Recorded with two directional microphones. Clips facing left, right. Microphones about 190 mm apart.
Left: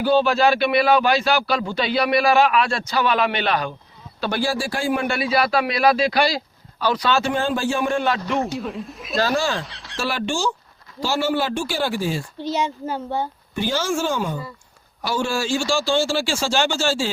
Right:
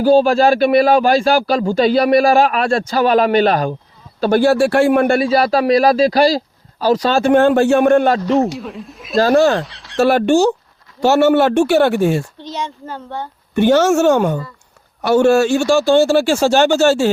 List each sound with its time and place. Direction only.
0.0 s speech: 40° right (ahead or behind); by 8.1 s 60° right (ahead or behind)
8.1 s a man's voice: 40° right (ahead or behind)
8.5 s speech: centre (ahead or behind)
9.1 s speech: 55° right (ahead or behind)
9.6 s speech: centre (ahead or behind)
10.0 s speech: 55° right (ahead or behind)
12.4 s a child's voice: 10° left (ahead or behind)
13.6 s speech: 65° right (ahead or behind)